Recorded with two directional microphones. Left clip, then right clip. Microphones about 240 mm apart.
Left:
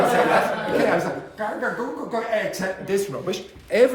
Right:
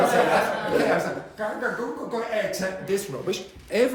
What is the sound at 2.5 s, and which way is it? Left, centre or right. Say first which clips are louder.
Speech: left 2 dB; centre.